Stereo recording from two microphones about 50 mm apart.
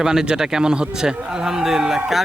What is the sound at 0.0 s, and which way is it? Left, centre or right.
A man's voice, centre.